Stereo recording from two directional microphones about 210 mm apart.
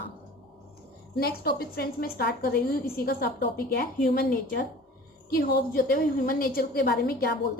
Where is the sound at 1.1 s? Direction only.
45° left (ahead or behind).